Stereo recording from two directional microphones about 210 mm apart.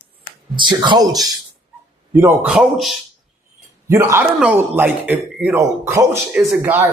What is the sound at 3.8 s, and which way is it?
A man's voice, 10° right (ahead or behind).